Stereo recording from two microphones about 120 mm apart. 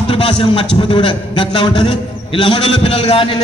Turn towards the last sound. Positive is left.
turn(degrees=55)  # may be behind; listen again after turning